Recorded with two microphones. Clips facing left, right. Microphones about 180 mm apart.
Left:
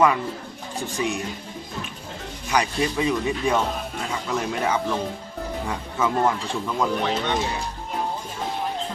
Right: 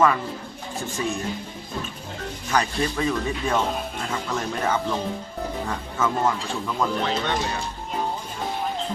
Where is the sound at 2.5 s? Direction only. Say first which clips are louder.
Left 1 dB; 10° left (ahead or behind).